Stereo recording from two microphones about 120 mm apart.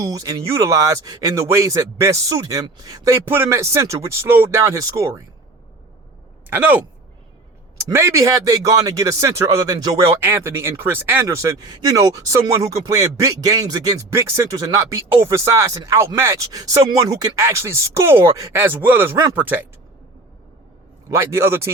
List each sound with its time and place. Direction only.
0.0 s speech: 30° right (ahead or behind)
6.5 s speech: 15° right (ahead or behind)
7.9 s speech: 25° right (ahead or behind)
10.2 s speech: 20° right (ahead or behind)
21.1 s speech: 25° right (ahead or behind)